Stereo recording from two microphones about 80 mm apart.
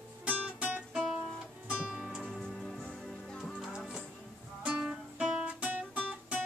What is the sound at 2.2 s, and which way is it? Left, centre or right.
Music, centre.